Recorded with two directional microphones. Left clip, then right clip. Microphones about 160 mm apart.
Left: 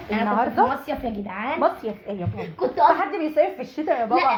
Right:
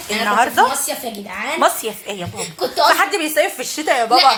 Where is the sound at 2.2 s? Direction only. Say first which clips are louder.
Right 1 dB; 40° right (ahead or behind).